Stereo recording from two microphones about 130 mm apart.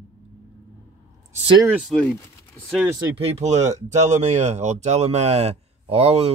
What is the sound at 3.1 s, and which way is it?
Speech, 55° right (ahead or behind).